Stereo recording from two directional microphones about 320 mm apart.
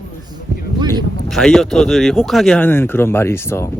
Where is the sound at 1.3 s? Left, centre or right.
Centre.